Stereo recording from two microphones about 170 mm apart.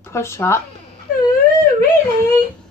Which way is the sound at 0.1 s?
15° left (ahead or behind).